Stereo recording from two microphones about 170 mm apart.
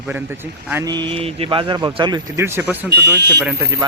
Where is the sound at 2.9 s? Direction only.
80° right.